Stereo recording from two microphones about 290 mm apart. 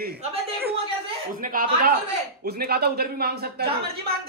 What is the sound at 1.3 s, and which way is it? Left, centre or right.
Speech, right.